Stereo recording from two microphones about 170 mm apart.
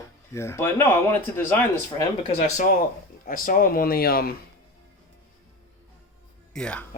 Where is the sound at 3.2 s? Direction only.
55° left (ahead or behind).